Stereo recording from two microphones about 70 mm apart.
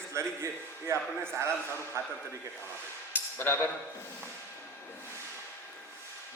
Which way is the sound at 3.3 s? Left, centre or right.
Left.